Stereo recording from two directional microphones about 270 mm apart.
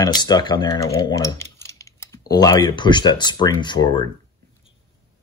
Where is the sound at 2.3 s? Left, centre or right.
Centre.